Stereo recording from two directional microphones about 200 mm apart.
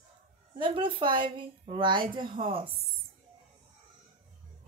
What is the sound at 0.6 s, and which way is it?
A woman's voice, 25° right (ahead or behind).